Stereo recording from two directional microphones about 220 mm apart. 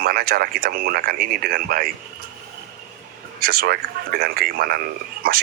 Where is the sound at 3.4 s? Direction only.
45° right (ahead or behind).